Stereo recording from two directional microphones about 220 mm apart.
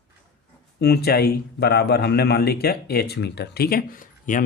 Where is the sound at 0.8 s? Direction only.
45° left (ahead or behind).